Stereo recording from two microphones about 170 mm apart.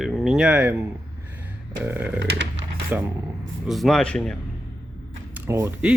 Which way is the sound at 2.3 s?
90° right.